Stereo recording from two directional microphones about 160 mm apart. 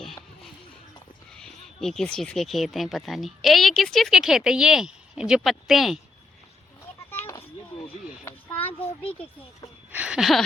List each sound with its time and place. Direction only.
1.3 s speech: 5° left (ahead or behind)
7.1 s a sound: 15° left (ahead or behind)
9.9 s speech: 5° right (ahead or behind)